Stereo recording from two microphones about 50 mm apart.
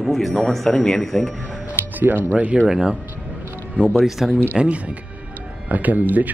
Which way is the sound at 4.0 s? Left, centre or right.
Centre.